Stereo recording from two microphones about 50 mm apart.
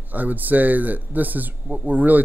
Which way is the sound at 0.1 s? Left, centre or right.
Right.